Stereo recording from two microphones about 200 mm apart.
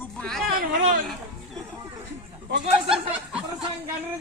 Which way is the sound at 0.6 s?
45° right (ahead or behind).